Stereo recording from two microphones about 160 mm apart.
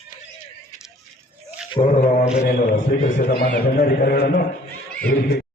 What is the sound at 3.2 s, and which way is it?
A man's voice, 75° left (ahead or behind).